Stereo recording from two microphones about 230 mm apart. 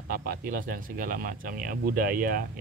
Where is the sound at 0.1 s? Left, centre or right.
Right.